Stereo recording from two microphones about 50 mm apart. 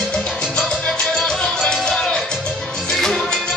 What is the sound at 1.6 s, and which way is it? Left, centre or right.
Music, centre.